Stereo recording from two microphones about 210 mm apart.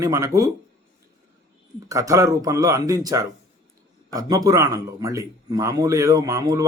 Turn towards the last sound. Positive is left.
turn(degrees=-15)  # may be behind; listen again after turning